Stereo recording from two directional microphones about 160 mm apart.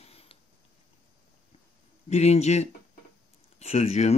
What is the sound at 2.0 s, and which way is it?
Speech, 45° left (ahead or behind).